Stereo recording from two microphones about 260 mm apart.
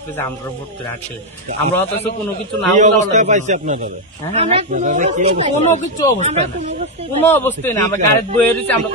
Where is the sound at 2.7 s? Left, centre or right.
Right.